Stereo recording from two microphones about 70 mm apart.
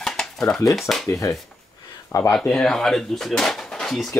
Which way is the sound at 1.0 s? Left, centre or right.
Left.